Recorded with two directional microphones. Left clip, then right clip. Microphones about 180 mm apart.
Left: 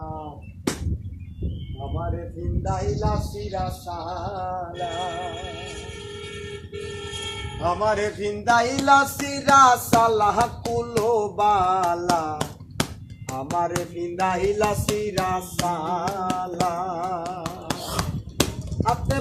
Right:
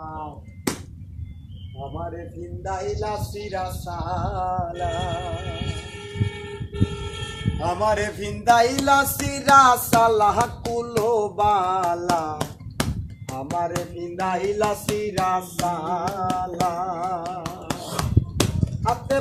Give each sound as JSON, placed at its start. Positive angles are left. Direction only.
{"t": 2.6, "sound": "speech", "side_deg": -5}
{"t": 4.4, "sound": "music", "side_deg": -25}
{"t": 4.7, "sound": "speech", "side_deg": 0}
{"t": 7.6, "sound": "music", "side_deg": -55}